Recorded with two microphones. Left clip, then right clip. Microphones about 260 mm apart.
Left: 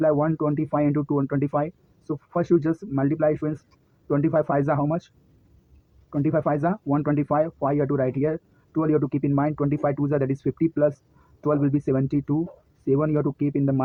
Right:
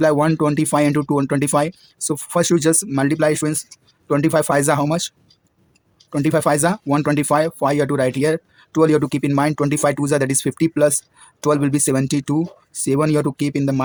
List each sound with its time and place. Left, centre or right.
0.0 s speech: right
6.1 s speech: right